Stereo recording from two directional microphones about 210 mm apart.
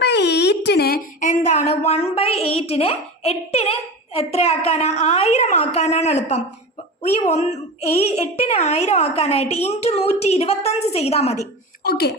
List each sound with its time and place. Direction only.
0.0 s a sound: 55° left (ahead or behind); by 2.5 s 30° left (ahead or behind)
2.6 s a child's voice: 30° left (ahead or behind)
11.8 s speech: 50° left (ahead or behind)